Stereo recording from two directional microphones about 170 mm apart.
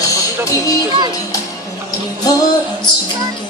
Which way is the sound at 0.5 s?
20° left (ahead or behind).